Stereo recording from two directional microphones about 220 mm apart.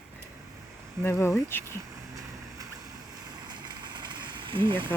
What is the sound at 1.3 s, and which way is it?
Speech, 10° left (ahead or behind).